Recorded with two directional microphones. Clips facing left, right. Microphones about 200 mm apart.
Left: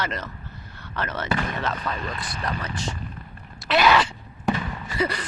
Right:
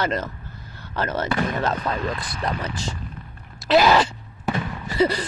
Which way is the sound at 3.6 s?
35° right (ahead or behind).